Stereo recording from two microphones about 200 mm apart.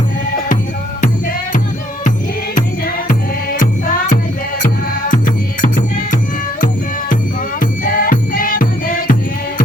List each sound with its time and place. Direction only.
2.6 s music: 45° left (ahead or behind)
7.6 s music: 45° left (ahead or behind)